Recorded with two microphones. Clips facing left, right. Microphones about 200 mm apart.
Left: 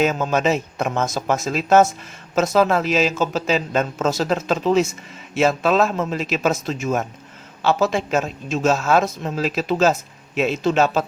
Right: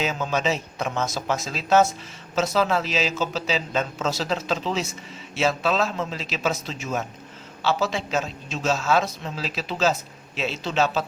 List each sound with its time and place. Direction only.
0.0 s a woman's voice: 50° left (ahead or behind)